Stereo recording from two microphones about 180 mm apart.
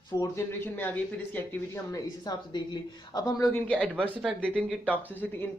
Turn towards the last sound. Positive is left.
turn(degrees=10)  # may be behind; listen again after turning